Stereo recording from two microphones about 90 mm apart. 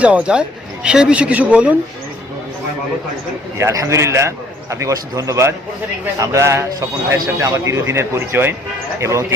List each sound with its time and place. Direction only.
0.0 s speech: 15° right (ahead or behind)
3.6 s a man's voice: 35° right (ahead or behind)